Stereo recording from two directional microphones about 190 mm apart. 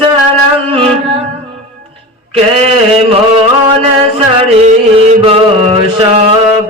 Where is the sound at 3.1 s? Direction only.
30° right (ahead or behind).